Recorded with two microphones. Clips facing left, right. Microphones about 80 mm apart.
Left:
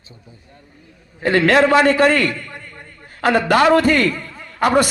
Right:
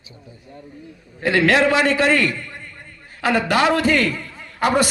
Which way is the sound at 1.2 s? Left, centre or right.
Left.